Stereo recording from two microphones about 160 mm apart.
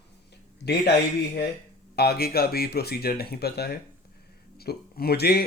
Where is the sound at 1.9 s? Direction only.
85° left.